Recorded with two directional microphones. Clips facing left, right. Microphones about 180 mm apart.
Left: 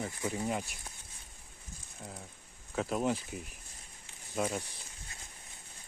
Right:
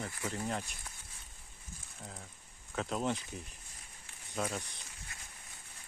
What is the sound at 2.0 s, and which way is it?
Speech, 5° left (ahead or behind).